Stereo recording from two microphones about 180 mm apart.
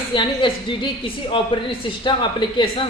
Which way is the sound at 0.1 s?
25° left (ahead or behind).